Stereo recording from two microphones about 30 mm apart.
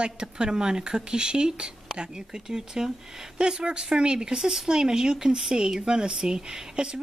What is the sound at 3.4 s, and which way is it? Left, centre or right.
Speech, right.